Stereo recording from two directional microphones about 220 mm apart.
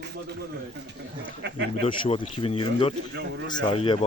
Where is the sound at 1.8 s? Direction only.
25° left (ahead or behind).